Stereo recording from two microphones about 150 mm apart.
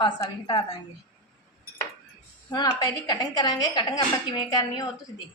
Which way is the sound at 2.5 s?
25° left (ahead or behind).